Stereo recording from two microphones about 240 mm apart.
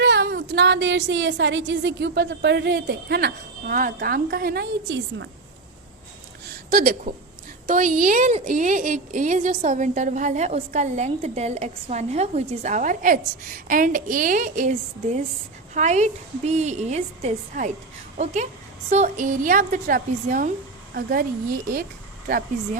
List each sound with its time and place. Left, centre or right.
0.0 s speech: right
6.7 s a woman's voice: right
18.9 s a woman's voice: right
22.3 s a woman's voice: right